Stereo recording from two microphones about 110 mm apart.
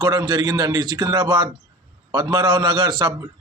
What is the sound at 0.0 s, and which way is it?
A man's voice, 40° right (ahead or behind).